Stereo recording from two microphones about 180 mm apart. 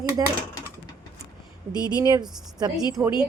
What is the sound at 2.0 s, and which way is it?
Speech, 20° right (ahead or behind).